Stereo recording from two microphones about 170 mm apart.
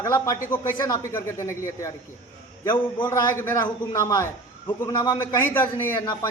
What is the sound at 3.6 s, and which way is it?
A man's voice, 20° left (ahead or behind).